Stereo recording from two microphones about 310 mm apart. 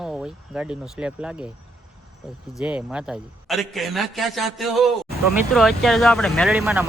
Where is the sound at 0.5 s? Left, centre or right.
Centre.